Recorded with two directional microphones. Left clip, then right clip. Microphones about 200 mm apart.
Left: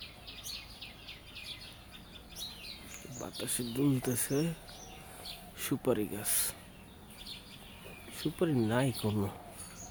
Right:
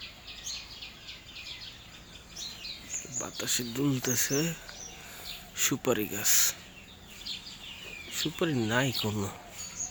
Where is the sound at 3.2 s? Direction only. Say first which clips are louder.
Right 5 dB; 5° left (ahead or behind).